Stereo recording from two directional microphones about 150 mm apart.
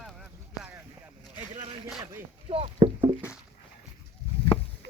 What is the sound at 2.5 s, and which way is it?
Speech, 40° right (ahead or behind).